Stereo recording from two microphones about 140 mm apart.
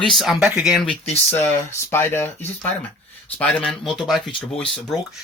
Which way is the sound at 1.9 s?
15° left (ahead or behind).